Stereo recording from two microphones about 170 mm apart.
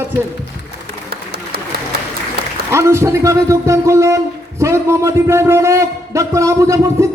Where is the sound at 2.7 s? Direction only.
15° right (ahead or behind).